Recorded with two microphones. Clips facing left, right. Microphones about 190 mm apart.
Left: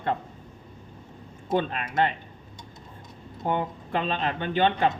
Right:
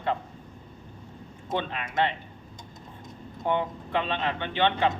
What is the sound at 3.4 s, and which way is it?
Speech, 40° left (ahead or behind).